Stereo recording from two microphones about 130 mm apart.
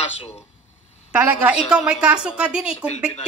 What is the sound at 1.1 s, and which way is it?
A woman's voice, 10° right (ahead or behind).